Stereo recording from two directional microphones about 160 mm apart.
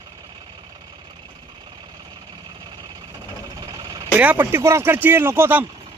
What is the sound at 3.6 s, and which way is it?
Vehicle, 25° right (ahead or behind).